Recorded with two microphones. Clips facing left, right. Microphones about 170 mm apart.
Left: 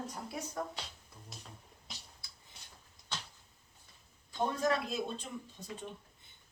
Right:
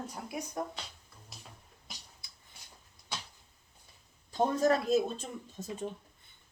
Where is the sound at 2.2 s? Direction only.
20° right (ahead or behind).